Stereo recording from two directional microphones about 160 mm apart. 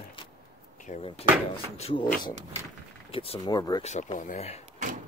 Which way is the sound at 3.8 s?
50° left (ahead or behind).